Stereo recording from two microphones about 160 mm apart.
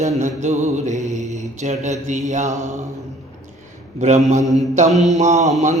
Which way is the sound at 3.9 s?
50° right (ahead or behind).